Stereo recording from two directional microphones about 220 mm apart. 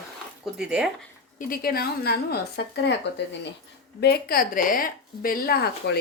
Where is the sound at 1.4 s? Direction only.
40° left (ahead or behind).